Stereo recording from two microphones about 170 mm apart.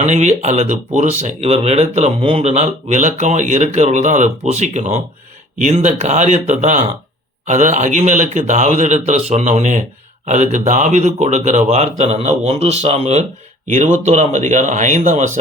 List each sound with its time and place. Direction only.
0.0 s a man's voice: 45° right (ahead or behind)